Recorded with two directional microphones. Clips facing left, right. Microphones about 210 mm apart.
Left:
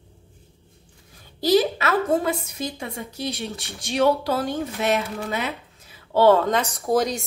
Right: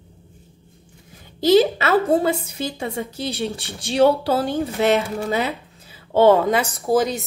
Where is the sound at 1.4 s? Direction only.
25° right (ahead or behind).